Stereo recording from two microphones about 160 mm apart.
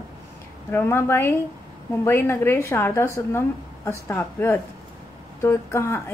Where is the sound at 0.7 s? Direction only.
15° left (ahead or behind).